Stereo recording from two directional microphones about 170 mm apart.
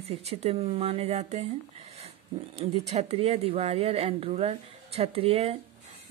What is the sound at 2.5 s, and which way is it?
Speech, 40° right (ahead or behind).